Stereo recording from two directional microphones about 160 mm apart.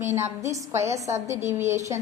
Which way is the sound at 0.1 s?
15° right (ahead or behind).